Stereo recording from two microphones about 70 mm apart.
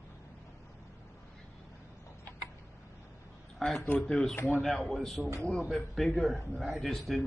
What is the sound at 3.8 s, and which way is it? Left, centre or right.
Speech, centre.